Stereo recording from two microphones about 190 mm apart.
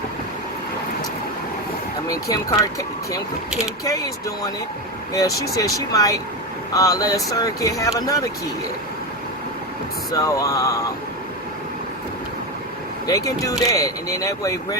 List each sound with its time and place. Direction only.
2.0 s speech: 20° left (ahead or behind)
10.1 s speech: 20° left (ahead or behind)
13.1 s speech: 15° left (ahead or behind)